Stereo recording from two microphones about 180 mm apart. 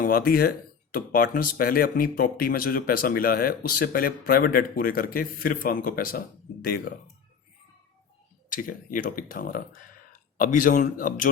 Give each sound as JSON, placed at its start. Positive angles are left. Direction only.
{"t": 0.0, "sound": "speech", "side_deg": 55}
{"t": 8.4, "sound": "speech", "side_deg": 50}